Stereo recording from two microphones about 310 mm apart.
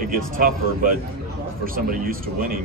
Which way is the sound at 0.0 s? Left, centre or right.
Right.